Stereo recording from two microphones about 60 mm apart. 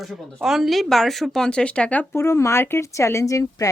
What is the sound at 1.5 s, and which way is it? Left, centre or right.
Speech, centre.